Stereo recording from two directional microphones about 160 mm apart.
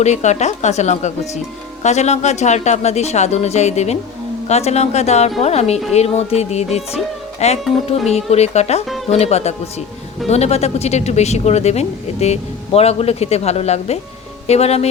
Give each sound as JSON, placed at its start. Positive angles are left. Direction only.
{"t": 0.0, "sound": "speech", "side_deg": 45}